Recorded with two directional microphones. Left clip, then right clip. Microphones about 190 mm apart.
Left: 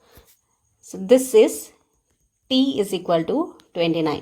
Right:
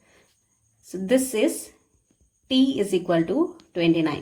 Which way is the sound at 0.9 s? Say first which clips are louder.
Left 6 dB; 35° left (ahead or behind).